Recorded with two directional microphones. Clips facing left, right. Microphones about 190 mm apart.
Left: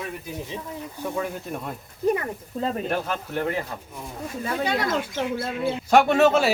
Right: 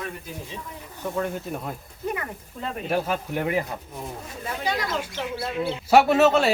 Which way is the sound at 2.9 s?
10° right (ahead or behind).